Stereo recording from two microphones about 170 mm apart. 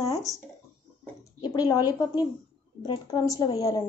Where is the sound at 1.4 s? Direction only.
25° left (ahead or behind).